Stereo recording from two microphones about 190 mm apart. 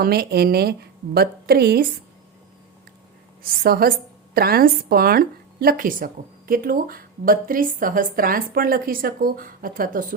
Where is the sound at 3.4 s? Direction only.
50° right (ahead or behind).